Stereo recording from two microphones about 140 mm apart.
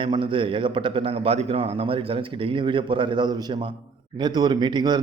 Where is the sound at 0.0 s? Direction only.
35° right (ahead or behind).